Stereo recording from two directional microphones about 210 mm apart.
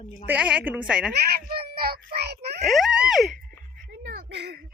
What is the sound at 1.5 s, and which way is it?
Child singing, 45° right (ahead or behind).